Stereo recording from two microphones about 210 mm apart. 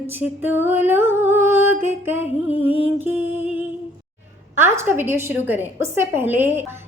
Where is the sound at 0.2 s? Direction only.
10° right (ahead or behind).